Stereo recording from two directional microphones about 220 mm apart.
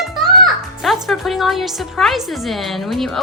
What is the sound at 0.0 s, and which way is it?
A child's voice, centre (ahead or behind).